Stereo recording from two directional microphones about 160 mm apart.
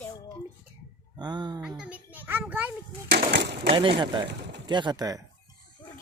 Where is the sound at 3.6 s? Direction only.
35° right (ahead or behind).